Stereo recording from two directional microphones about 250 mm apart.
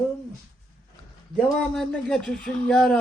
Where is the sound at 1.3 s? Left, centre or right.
Centre.